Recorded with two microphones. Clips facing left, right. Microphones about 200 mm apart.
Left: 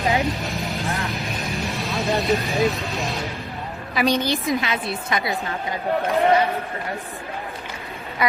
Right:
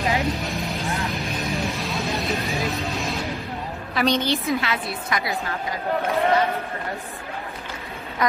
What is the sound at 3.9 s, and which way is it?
A woman's voice, 10° left (ahead or behind).